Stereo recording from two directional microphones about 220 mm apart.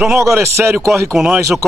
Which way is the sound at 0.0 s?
10° right (ahead or behind).